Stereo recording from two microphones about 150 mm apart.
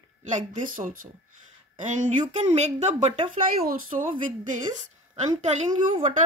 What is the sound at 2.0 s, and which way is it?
Speech, 50° right (ahead or behind).